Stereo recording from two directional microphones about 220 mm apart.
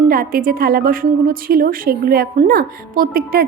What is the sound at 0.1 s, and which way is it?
A woman's voice, 40° right (ahead or behind).